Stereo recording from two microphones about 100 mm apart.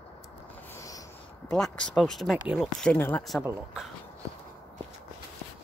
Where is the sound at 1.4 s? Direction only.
5° left (ahead or behind).